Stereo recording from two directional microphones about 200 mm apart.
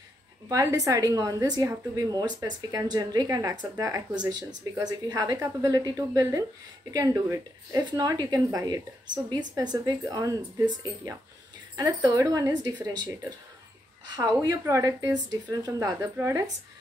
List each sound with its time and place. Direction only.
0.5 s a woman's voice: 15° right (ahead or behind)
11.7 s a woman's voice: 20° right (ahead or behind)